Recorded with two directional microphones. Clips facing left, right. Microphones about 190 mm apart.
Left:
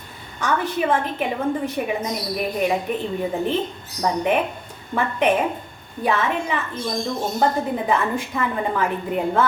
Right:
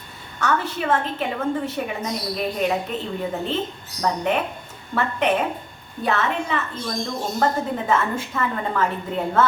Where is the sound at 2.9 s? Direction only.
15° left (ahead or behind).